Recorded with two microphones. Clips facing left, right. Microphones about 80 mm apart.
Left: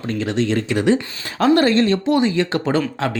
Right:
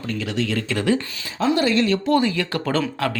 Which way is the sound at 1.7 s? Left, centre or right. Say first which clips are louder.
Left 3 dB; left.